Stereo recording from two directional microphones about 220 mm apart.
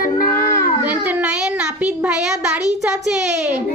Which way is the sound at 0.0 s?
40° left (ahead or behind).